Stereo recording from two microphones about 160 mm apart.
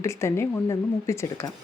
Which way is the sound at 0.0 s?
15° left (ahead or behind).